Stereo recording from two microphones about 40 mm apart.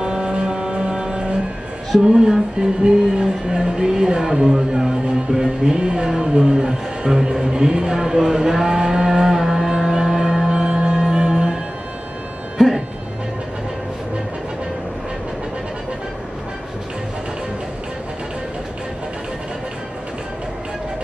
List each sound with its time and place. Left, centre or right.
0.0 s music: centre
2.0 s speech: centre
10.5 s music: right
12.5 s music: centre